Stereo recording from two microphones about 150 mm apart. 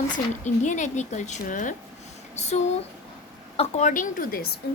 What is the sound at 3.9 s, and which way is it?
Speech, 60° left (ahead or behind).